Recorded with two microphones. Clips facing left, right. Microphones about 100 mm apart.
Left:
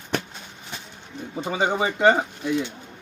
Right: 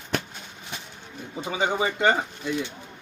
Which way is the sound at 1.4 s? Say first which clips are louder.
Left 2 dB; centre (ahead or behind).